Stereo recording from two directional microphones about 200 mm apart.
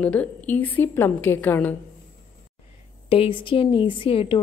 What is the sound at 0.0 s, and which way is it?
A woman's voice, 5° left (ahead or behind).